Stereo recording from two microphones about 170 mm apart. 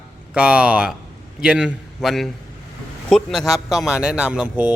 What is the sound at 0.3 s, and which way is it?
A man's voice, 5° right (ahead or behind).